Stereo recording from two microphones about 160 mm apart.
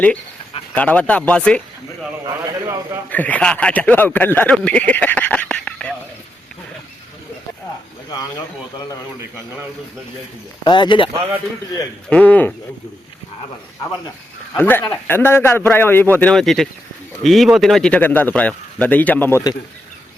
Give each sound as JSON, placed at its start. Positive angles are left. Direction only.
{"t": 0.7, "sound": "speech", "side_deg": 10}
{"t": 2.2, "sound": "a man's voice", "side_deg": -20}
{"t": 3.1, "sound": "speech", "side_deg": 10}
{"t": 8.1, "sound": "speech", "side_deg": 20}
{"t": 10.6, "sound": "speech", "side_deg": 30}
{"t": 12.0, "sound": "speech", "side_deg": 10}
{"t": 14.5, "sound": "speech", "side_deg": 10}